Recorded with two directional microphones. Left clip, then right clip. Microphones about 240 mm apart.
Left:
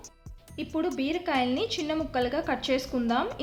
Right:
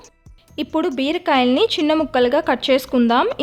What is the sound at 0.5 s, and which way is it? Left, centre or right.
A woman's voice, right.